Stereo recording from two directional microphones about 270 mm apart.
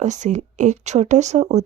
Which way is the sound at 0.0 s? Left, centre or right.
Right.